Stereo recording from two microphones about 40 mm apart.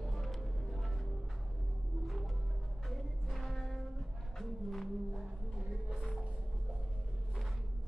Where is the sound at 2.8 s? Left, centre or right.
Centre.